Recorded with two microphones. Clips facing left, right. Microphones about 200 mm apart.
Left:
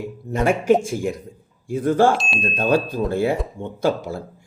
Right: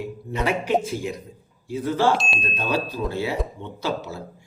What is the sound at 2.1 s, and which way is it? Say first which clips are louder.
Speech: left 1 dB; centre (ahead or behind).